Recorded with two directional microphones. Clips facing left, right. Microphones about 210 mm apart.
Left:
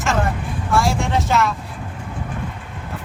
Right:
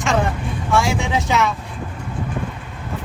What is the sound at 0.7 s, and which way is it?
Speech, centre (ahead or behind).